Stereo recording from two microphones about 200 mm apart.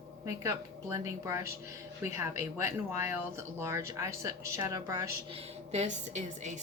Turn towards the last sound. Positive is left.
turn(degrees=-35)  # may be behind; listen again after turning